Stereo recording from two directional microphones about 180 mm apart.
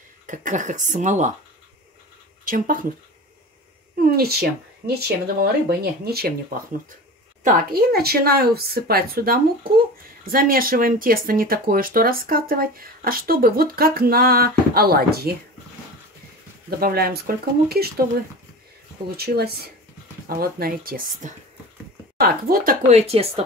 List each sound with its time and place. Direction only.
0.3 s speech: 45° right (ahead or behind)
2.4 s speech: 45° right (ahead or behind)
4.0 s speech: 60° right (ahead or behind)
7.4 s speech: 55° right (ahead or behind)
16.8 s speech: 55° right (ahead or behind)
19.1 s speech: 60° right (ahead or behind)
22.9 s speech: 35° right (ahead or behind)